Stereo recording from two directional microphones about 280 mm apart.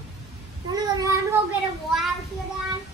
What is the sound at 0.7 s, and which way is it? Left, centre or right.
Child singing, centre.